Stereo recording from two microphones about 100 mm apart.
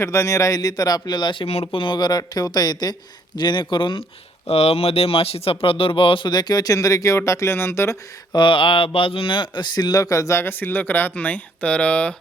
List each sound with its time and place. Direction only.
0.0 s speech: 30° left (ahead or behind); by 1.5 s 50° left (ahead or behind)
1.5 s speech: 75° left (ahead or behind); by 4.0 s 55° left (ahead or behind)
4.4 s speech: 90° left; by 7.9 s 25° left (ahead or behind)
8.3 s speech: 55° left (ahead or behind); by 12.1 s 15° left (ahead or behind)